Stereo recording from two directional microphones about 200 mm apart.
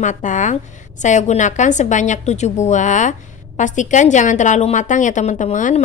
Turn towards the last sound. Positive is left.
turn(degrees=35)  # may be behind; listen again after turning